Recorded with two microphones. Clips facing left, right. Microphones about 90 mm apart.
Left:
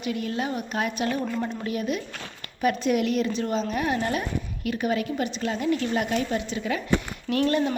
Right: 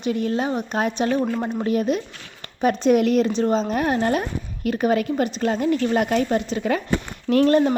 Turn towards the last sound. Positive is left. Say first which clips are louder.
# right 7 dB
turn(degrees=-40)  # may be behind; listen again after turning